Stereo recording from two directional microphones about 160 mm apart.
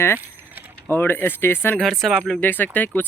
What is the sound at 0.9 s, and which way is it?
Speech, 15° left (ahead or behind).